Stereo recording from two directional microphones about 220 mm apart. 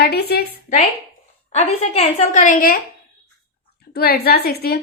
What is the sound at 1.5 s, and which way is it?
A woman's voice, 30° left (ahead or behind).